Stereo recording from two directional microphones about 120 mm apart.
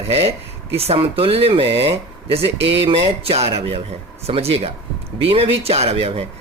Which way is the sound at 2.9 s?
55° right (ahead or behind).